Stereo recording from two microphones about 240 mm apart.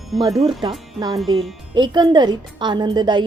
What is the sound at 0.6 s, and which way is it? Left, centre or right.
Speech, centre.